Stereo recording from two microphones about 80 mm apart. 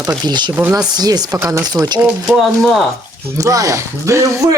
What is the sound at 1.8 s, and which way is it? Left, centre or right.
Speech, right.